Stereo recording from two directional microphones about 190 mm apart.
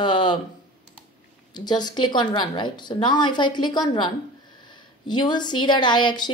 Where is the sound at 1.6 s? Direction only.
20° left (ahead or behind).